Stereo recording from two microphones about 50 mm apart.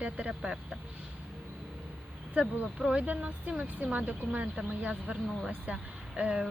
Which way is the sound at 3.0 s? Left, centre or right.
Right.